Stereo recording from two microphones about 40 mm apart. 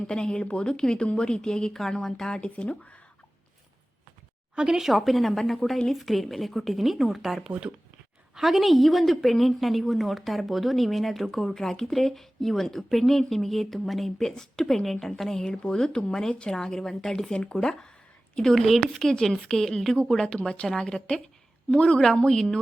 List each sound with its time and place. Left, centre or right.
0.1 s speech: left
4.5 s speech: centre
4.8 s speech: centre
17.3 s speech: left
18.3 s speech: centre
21.1 s a woman's voice: left
21.9 s speech: centre